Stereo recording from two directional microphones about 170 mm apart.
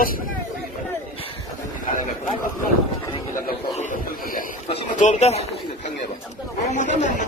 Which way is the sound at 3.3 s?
50° left (ahead or behind).